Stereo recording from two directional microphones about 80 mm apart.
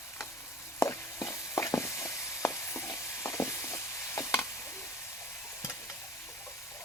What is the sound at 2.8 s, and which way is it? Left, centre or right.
Stir, left.